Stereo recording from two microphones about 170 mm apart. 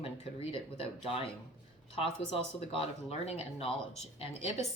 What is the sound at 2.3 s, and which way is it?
A woman's voice, 35° left (ahead or behind).